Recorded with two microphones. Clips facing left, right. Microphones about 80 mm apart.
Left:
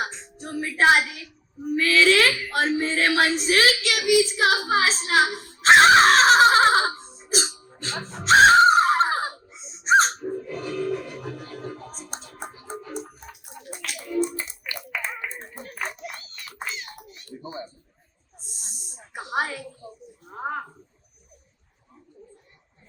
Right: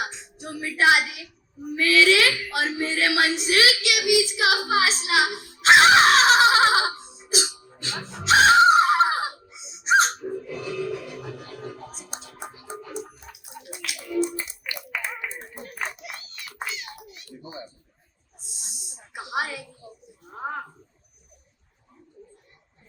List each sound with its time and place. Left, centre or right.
0.0 s speech: left
10.2 s music: left
15.8 s a sound: left
18.3 s snake: left